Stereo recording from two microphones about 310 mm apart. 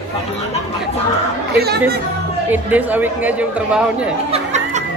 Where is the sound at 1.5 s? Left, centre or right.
Right.